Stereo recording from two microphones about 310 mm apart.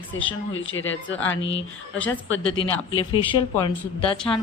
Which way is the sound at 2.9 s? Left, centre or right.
Centre.